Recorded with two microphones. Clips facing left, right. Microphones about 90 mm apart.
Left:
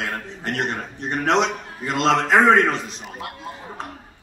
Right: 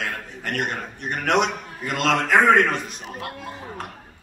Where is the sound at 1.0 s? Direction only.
25° left (ahead or behind).